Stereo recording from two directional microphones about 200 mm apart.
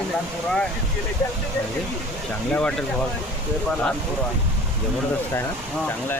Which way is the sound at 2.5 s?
5° left (ahead or behind).